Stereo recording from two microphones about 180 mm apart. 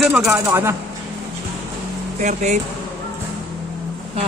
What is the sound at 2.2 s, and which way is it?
Speech, 40° right (ahead or behind).